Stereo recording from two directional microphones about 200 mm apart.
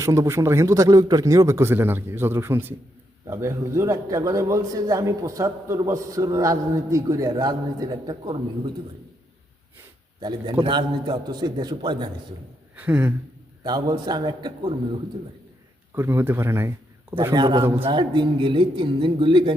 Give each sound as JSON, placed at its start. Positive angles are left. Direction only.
{"t": 0.0, "sound": "a man's voice", "side_deg": -15}
{"t": 10.2, "sound": "a man's voice", "side_deg": -25}
{"t": 12.7, "sound": "a sound", "side_deg": -10}
{"t": 13.7, "sound": "a man's voice", "side_deg": -20}
{"t": 16.0, "sound": "a man's voice", "side_deg": -10}